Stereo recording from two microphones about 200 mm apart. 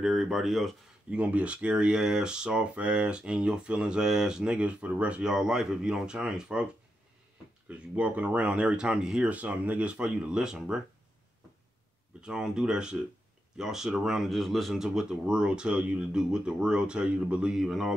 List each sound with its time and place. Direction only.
0.0 s speech: centre (ahead or behind)
7.9 s speech: 5° right (ahead or behind)
12.2 s speech: 5° right (ahead or behind)